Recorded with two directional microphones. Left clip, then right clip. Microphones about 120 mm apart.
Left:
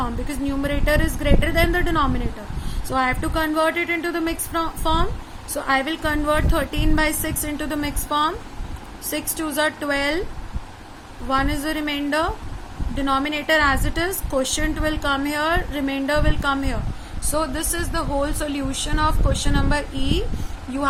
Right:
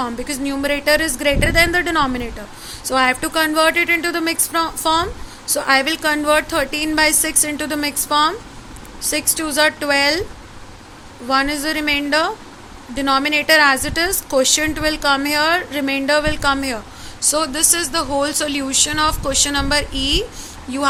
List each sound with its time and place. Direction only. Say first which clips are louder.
0.0 s a woman's voice: right 4 dB; 25° right (ahead or behind)
11.3 s a woman's voice: right 4 dB; 20° right (ahead or behind)